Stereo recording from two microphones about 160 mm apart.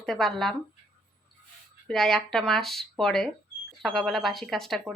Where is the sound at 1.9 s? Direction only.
Centre (ahead or behind).